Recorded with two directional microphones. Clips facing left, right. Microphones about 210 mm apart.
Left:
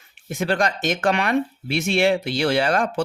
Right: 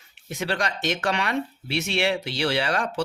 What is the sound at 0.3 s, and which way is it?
Speech, 50° left (ahead or behind).